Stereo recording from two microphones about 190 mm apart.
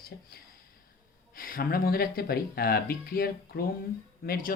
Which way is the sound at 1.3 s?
50° left (ahead or behind).